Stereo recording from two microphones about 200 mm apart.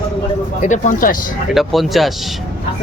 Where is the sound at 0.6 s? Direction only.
40° left (ahead or behind).